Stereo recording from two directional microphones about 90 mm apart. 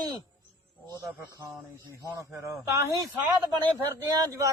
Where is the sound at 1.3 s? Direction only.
35° right (ahead or behind).